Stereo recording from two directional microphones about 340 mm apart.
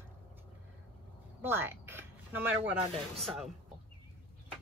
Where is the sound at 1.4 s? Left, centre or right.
Centre.